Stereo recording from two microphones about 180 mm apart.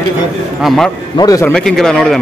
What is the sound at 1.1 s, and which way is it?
Speech, 20° left (ahead or behind).